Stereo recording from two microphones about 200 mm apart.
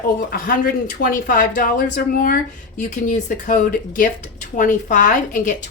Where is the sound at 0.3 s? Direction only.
45° left (ahead or behind).